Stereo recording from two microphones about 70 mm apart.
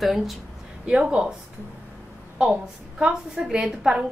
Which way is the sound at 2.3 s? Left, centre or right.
Centre.